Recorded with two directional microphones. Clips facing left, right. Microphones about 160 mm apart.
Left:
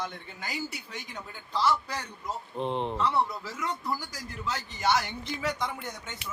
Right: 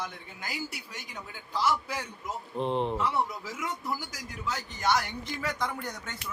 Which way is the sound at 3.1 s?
10° right (ahead or behind).